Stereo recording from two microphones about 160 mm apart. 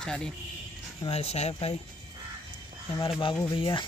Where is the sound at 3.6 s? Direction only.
30° left (ahead or behind).